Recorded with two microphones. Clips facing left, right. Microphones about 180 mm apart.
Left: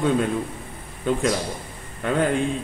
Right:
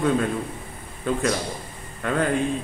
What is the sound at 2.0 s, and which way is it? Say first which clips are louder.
Speech: left 2 dB; 25° left (ahead or behind).